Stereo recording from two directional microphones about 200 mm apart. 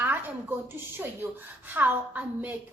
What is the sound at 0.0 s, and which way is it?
A woman's voice, 10° right (ahead or behind).